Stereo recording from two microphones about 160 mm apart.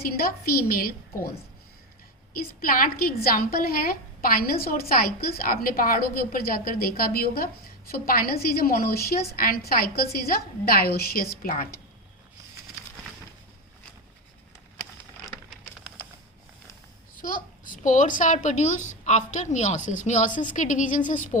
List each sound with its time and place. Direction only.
0.0 s a woman's voice: 70° left (ahead or behind)
2.4 s a woman's voice: 65° left (ahead or behind)
17.2 s a child's voice: 60° left (ahead or behind)